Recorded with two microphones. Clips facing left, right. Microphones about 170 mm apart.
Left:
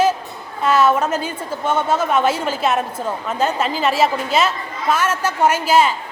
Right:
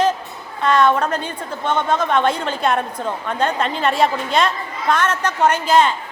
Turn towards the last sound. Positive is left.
turn(degrees=10)  # may be behind; listen again after turning